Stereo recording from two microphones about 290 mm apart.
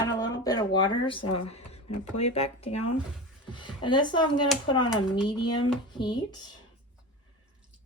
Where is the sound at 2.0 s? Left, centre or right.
Left.